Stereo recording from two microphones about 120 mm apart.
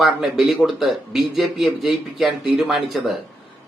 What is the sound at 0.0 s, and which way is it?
Speech, centre (ahead or behind).